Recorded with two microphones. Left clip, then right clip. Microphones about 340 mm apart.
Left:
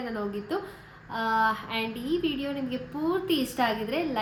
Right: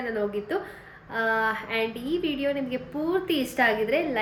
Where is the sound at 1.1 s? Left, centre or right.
Centre.